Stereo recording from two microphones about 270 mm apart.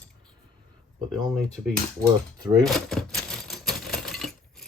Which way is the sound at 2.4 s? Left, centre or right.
Centre.